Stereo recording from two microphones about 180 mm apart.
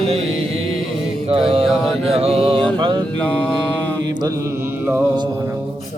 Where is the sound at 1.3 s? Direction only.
30° right (ahead or behind).